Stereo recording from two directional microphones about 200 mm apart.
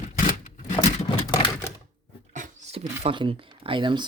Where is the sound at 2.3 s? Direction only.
35° right (ahead or behind).